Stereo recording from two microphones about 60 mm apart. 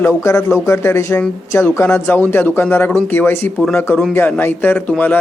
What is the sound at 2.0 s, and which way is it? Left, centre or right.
Speech, left.